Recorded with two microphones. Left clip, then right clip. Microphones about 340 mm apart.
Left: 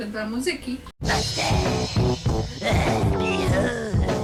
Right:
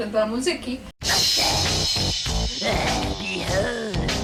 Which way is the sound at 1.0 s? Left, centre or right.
Centre.